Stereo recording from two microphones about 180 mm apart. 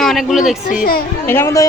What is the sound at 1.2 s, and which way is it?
Speech, 10° left (ahead or behind).